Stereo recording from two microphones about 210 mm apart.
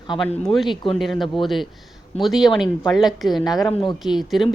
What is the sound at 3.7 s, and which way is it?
Speech, 20° left (ahead or behind).